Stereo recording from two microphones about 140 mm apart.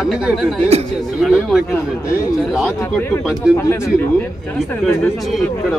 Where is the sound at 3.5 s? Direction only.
20° left (ahead or behind).